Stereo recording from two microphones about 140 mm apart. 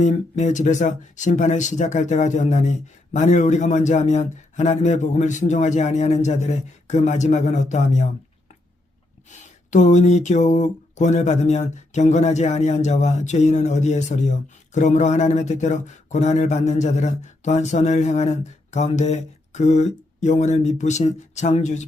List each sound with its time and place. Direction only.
0.0 s speech: 60° left (ahead or behind)
9.3 s speech: 60° left (ahead or behind)